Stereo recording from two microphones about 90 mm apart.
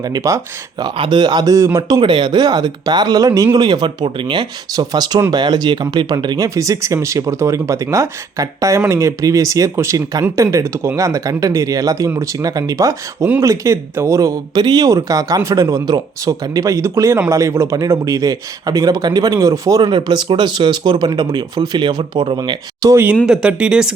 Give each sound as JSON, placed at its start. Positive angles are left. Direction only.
{"t": 0.1, "sound": "speech", "side_deg": -35}
{"t": 0.8, "sound": "speech", "side_deg": -60}
{"t": 2.0, "sound": "speech", "side_deg": -60}
{"t": 14.6, "sound": "speech", "side_deg": -50}
{"t": 14.8, "sound": "speech", "side_deg": -40}
{"t": 19.8, "sound": "speech", "side_deg": -60}
{"t": 22.8, "sound": "speech", "side_deg": -45}
{"t": 23.2, "sound": "speech", "side_deg": -10}